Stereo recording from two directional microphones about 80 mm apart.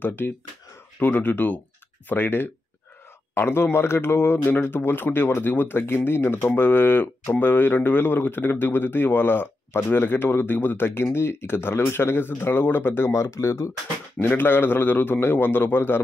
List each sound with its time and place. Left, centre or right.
0.0 s a man's voice: left